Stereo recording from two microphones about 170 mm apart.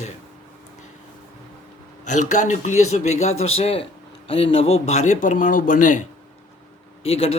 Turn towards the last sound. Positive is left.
turn(degrees=35)  # may be behind; listen again after turning